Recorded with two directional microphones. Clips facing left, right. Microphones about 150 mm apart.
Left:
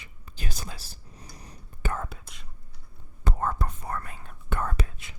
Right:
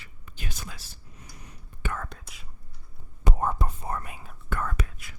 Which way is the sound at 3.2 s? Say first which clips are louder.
Right 1 dB; 15° right (ahead or behind).